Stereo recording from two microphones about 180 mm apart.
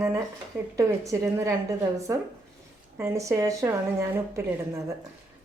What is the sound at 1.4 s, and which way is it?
A woman's voice, 15° right (ahead or behind).